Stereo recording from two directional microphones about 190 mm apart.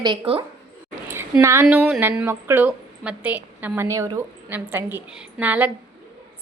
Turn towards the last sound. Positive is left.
turn(degrees=-10)  # may be behind; listen again after turning